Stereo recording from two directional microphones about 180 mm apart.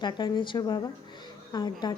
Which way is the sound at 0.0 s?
25° left (ahead or behind).